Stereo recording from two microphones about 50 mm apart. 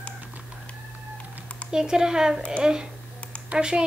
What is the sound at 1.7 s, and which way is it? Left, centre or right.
A woman's voice, centre.